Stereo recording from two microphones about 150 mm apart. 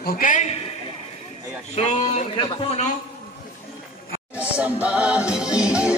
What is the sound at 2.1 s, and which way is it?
Speech, 35° left (ahead or behind).